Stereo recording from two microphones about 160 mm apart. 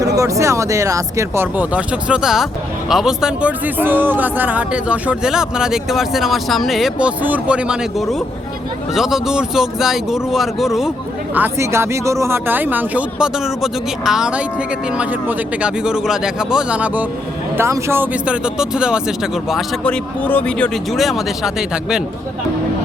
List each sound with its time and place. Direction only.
0.2 s speech: 20° right (ahead or behind); by 10.9 s centre (ahead or behind)
11.3 s speech: 15° right (ahead or behind)